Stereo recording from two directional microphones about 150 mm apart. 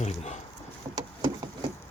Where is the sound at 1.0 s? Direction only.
25° right (ahead or behind).